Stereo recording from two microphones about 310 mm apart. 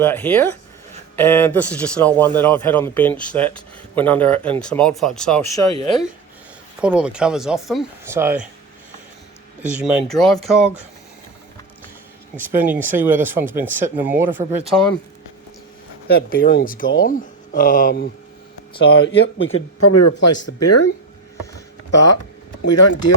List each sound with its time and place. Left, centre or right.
0.0 s speech: centre
6.8 s speech: centre
9.8 s speech: centre
12.4 s speech: centre
16.0 s speech: left
21.9 s speech: left